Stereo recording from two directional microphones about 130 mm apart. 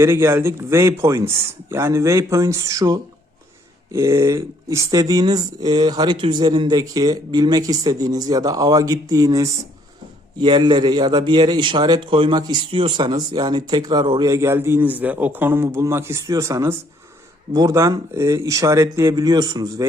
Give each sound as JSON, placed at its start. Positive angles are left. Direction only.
{"t": 0.0, "sound": "a man's voice", "side_deg": -20}
{"t": 14.3, "sound": "speech", "side_deg": -20}